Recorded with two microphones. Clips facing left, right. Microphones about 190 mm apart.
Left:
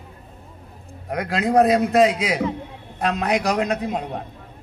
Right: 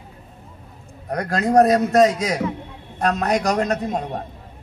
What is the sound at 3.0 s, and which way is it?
Speech, 45° right (ahead or behind).